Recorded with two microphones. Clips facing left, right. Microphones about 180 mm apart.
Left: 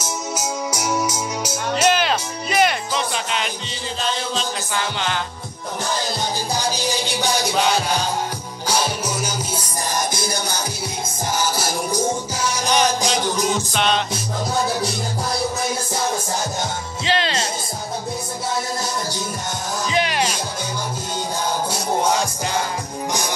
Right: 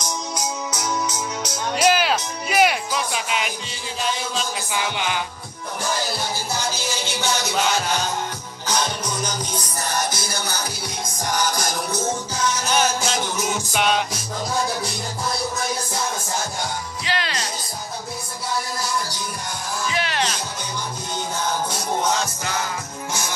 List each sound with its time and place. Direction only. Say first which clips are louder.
0.0 s music: left 2 dB; 10° left (ahead or behind)
1.8 s music: even; 5° right (ahead or behind)
6.5 s music: left 5 dB; 15° left (ahead or behind)
8.6 s music: left 2 dB; 10° left (ahead or behind)
13.0 s music: left 4 dB; 5° right (ahead or behind)
17.0 s music: left 6 dB; 25° left (ahead or behind)
19.9 s music: left 4 dB; 15° left (ahead or behind)